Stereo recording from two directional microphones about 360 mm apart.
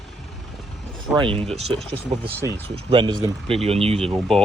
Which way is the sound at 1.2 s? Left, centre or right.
Centre.